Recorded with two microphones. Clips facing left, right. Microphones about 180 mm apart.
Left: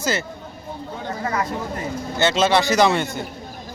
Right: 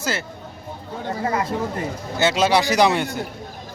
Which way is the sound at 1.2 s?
30° right (ahead or behind).